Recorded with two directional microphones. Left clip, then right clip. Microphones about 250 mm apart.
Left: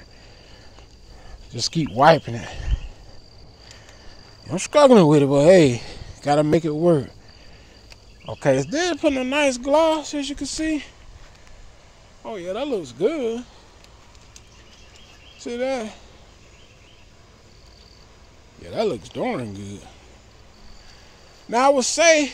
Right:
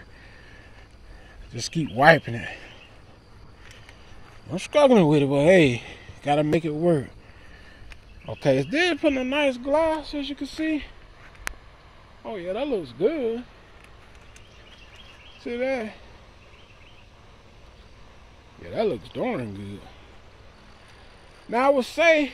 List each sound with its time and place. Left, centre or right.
1.5 s speech: centre
4.5 s speech: centre
5.6 s speech: left
5.9 s speech: centre
8.3 s speech: centre
9.1 s speech: centre
12.2 s speech: centre
15.4 s speech: centre
18.6 s speech: centre
21.5 s speech: centre